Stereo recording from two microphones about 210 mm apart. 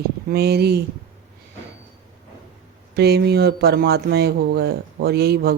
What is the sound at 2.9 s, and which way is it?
Speech, 50° right (ahead or behind).